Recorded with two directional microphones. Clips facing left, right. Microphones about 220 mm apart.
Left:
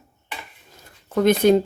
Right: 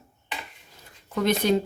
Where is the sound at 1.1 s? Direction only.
50° left (ahead or behind).